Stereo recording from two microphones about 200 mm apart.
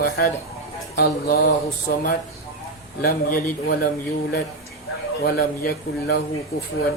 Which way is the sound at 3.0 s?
50° left (ahead or behind).